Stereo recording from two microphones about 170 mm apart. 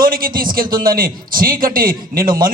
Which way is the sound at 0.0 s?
55° right (ahead or behind).